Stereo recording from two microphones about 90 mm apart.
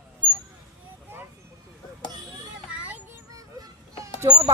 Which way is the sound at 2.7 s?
15° right (ahead or behind).